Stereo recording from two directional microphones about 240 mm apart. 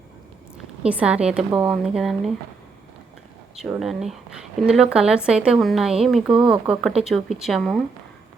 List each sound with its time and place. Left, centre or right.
0.8 s a woman's voice: centre
3.5 s a woman's voice: centre